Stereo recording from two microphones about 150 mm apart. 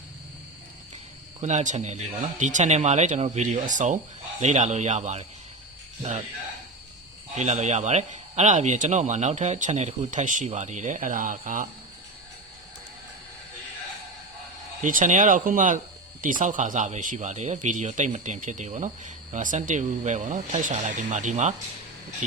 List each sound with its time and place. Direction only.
1.4 s a man's voice: 50° right (ahead or behind)
3.7 s a man's voice: 55° right (ahead or behind)
7.3 s a man's voice: 50° right (ahead or behind)
14.8 s speech: 60° right (ahead or behind)